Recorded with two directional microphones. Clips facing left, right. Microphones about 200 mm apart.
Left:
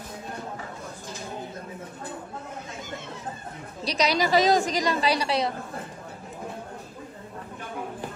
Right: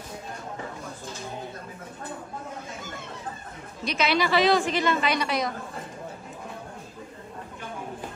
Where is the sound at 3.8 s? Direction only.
35° left (ahead or behind).